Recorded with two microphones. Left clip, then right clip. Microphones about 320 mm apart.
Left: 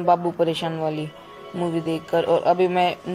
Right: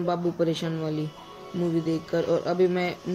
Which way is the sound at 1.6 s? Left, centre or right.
Left.